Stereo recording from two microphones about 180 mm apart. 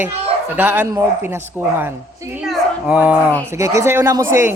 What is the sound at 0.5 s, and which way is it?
Speech, 10° right (ahead or behind).